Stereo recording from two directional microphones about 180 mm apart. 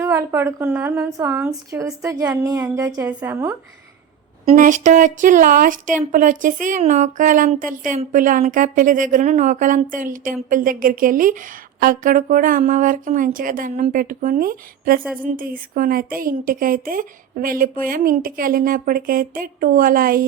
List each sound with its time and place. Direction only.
0.0 s a woman's voice: 15° right (ahead or behind)
4.4 s speech: 45° right (ahead or behind)